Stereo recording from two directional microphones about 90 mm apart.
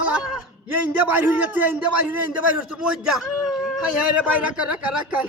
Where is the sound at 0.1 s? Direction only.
10° right (ahead or behind).